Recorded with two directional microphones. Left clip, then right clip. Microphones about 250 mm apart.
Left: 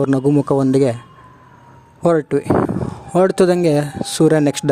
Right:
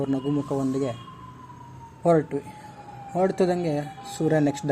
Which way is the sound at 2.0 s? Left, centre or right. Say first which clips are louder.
Left 6 dB; left.